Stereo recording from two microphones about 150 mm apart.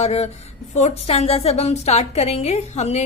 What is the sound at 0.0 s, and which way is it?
A woman's voice, 45° left (ahead or behind).